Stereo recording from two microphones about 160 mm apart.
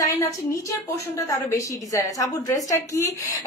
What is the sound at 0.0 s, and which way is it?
A woman's voice, 15° left (ahead or behind).